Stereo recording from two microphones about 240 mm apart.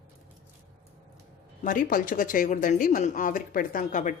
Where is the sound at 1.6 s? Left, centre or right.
Left.